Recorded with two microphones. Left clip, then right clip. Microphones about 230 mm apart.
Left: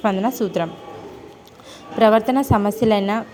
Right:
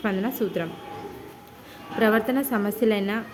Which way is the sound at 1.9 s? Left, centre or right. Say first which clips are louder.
Left 7 dB; left.